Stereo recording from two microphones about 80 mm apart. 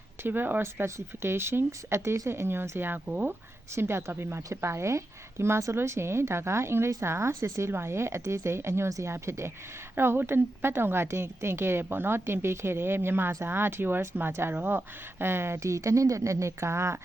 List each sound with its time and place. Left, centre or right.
0.2 s a woman's voice: right
3.8 s a woman's voice: right